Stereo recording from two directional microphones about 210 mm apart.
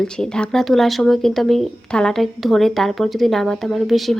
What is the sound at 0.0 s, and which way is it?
Speech, 5° left (ahead or behind).